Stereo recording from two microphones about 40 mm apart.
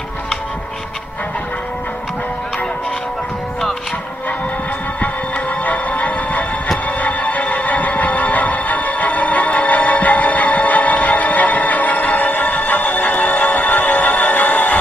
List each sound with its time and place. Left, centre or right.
5.6 s music: left